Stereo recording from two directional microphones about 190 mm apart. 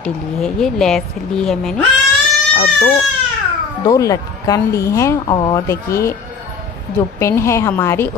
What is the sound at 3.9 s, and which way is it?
A woman's voice, 20° left (ahead or behind).